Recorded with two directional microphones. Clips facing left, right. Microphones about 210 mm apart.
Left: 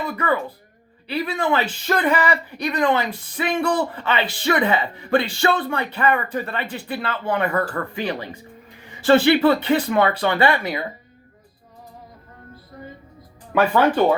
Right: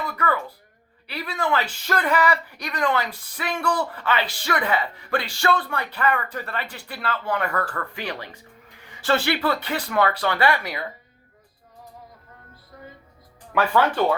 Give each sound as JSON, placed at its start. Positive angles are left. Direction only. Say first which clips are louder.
{"t": 0.0, "sound": "speech", "louder": "left 3 dB", "side_deg": 20}
{"t": 13.5, "sound": "speech", "louder": "left 4 dB", "side_deg": 15}